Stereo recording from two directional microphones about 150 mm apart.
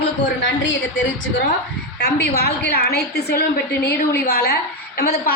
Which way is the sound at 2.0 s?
90° left.